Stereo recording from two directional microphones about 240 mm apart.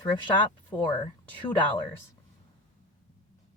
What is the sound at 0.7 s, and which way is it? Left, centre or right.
Speech, centre.